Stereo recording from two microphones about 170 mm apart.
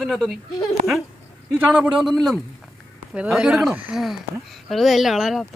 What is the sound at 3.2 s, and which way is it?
Speech, 5° right (ahead or behind).